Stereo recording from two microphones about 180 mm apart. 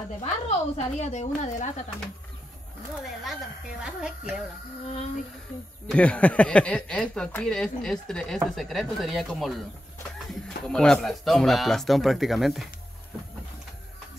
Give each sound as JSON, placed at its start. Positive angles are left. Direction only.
{"t": 0.2, "sound": "a woman's voice", "side_deg": 35}
{"t": 5.9, "sound": "speech", "side_deg": 5}
{"t": 10.7, "sound": "speech", "side_deg": 5}